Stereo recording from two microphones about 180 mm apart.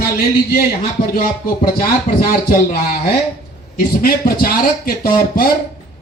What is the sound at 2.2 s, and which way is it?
Speech, 55° left (ahead or behind).